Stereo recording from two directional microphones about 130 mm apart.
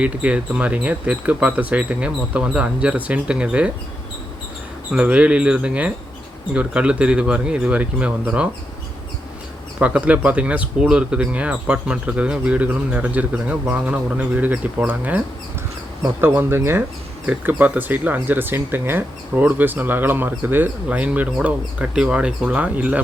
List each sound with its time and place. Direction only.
0.0 s speech: 10° right (ahead or behind)
4.9 s speech: 10° right (ahead or behind)
9.8 s speech: 10° right (ahead or behind)